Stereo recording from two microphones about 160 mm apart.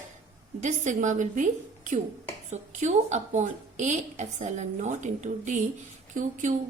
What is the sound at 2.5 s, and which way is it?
A woman's voice, 45° right (ahead or behind).